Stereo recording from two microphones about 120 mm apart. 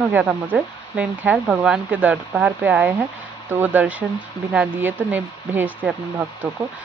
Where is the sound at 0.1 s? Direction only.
15° right (ahead or behind).